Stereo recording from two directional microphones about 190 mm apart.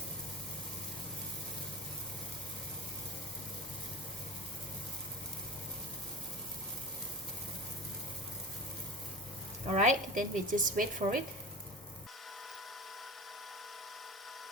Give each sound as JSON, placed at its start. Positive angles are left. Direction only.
{"t": 9.6, "sound": "a woman's voice", "side_deg": -40}